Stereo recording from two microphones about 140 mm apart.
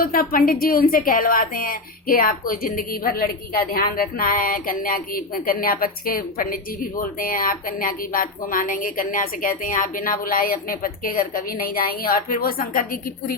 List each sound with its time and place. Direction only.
0.0 s a woman's voice: 90° left